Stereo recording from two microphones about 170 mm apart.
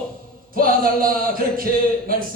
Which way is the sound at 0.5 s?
55° right (ahead or behind).